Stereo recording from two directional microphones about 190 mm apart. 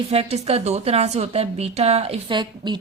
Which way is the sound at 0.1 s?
30° right (ahead or behind).